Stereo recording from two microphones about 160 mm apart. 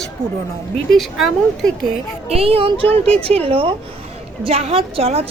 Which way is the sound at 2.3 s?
35° right (ahead or behind).